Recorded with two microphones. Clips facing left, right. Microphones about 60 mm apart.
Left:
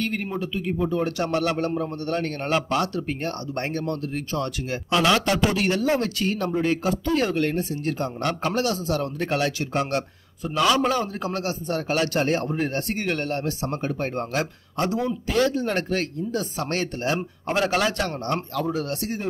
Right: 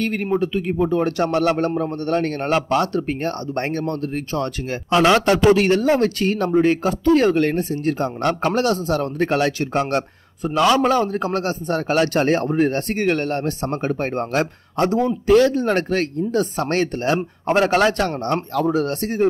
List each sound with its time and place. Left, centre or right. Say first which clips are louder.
0.0 s speech: right 7 dB; right